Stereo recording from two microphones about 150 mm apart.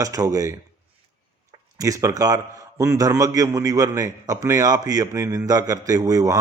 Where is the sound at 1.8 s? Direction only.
20° right (ahead or behind).